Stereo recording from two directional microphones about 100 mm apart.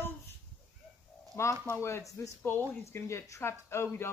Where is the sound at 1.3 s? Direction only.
25° left (ahead or behind).